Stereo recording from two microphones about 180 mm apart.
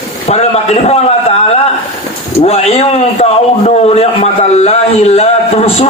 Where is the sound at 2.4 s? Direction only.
35° left (ahead or behind).